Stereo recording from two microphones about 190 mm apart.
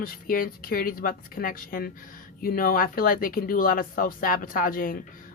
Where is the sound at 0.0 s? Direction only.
50° left (ahead or behind).